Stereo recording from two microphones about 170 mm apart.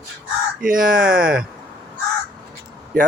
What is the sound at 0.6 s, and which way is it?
Speech, 55° right (ahead or behind).